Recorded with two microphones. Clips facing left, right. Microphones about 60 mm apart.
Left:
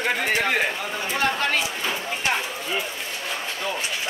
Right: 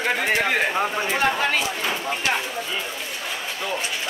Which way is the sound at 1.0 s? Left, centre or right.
Centre.